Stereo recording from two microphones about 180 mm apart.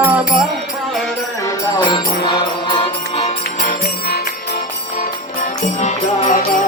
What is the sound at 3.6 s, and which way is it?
Music, 60° left (ahead or behind).